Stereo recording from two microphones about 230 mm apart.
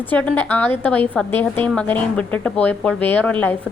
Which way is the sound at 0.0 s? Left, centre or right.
Centre.